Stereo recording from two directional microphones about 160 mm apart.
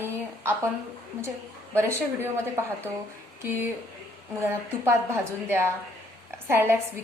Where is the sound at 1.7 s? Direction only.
15° right (ahead or behind).